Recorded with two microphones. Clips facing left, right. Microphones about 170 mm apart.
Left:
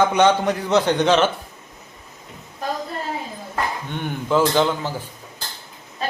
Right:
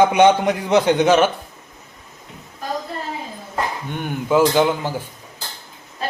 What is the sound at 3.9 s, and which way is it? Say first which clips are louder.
A man's voice: right 2 dB; 10° right (ahead or behind).